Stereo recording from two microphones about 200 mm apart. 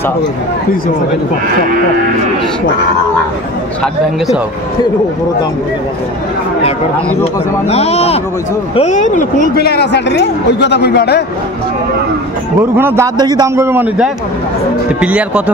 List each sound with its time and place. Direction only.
7.6 s a man's voice: 30° left (ahead or behind); by 11.2 s 55° left (ahead or behind)
12.7 s a man's voice: 10° right (ahead or behind)